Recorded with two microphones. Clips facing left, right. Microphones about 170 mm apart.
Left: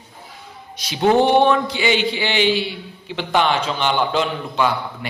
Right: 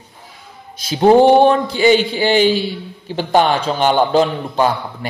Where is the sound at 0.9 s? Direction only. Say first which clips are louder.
Right 5 dB; 40° right (ahead or behind).